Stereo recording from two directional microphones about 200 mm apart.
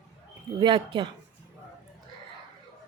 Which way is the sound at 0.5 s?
25° right (ahead or behind).